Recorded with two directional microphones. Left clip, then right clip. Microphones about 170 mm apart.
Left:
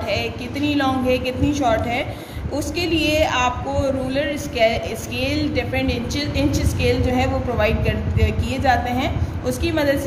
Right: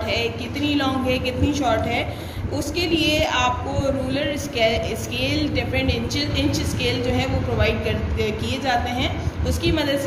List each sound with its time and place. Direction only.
0.1 s a woman's voice: 50° left (ahead or behind)